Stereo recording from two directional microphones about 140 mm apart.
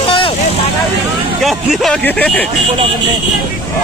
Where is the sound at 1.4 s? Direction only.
Centre (ahead or behind).